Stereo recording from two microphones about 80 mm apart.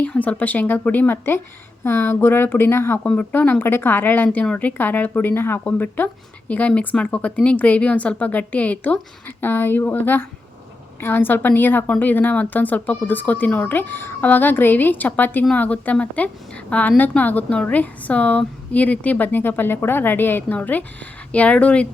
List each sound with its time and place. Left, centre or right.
0.0 s a woman's voice: centre
3.0 s a woman's voice: centre